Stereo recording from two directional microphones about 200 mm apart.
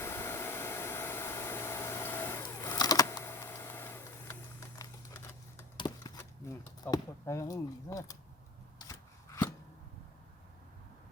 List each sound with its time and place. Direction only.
0.0 s hair dryer: 10° left (ahead or behind)
5.7 s a sound: 20° left (ahead or behind)
8.8 s shuffling cards: 15° left (ahead or behind)